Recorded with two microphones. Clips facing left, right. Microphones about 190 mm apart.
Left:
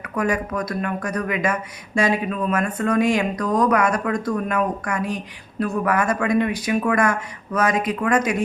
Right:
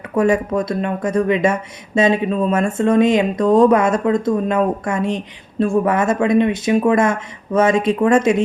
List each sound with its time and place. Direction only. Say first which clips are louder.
0.1 s speech: right 7 dB; 25° right (ahead or behind)